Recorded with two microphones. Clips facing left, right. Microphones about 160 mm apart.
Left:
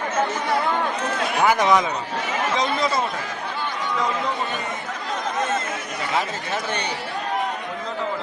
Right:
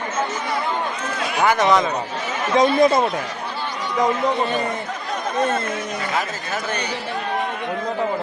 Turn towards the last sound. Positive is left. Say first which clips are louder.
# even
turn(degrees=30)  # may be behind; listen again after turning